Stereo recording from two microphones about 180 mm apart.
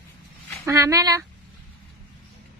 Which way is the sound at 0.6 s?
15° right (ahead or behind).